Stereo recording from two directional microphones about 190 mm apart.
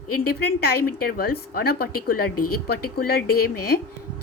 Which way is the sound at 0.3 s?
55° left (ahead or behind).